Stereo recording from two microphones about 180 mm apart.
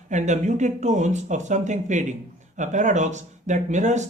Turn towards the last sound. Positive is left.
turn(degrees=-40)  # may be behind; listen again after turning